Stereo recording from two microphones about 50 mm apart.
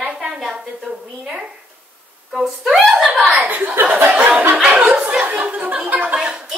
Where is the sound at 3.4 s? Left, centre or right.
Right.